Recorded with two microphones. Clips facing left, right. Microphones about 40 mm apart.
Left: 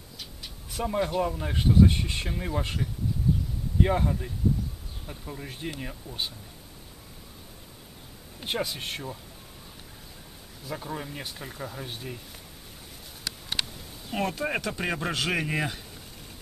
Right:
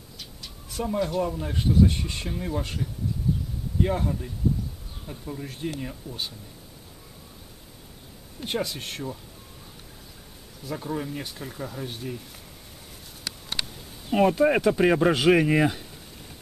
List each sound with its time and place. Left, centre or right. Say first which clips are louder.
0.2 s bird: even; centre
1.4 s speech: left 1 dB; centre
8.4 s speech: right 1 dB; centre
10.6 s speech: right 4 dB; centre
14.1 s speech: right 9 dB; centre